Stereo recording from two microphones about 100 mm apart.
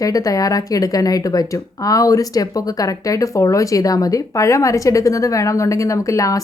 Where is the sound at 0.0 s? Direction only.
35° left (ahead or behind).